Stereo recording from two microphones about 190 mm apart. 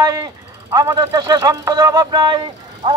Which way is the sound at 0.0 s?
20° right (ahead or behind).